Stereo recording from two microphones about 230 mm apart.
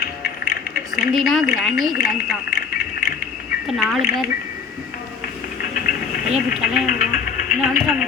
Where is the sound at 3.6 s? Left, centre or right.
Centre.